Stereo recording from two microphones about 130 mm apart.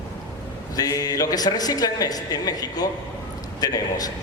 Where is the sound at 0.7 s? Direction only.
30° left (ahead or behind).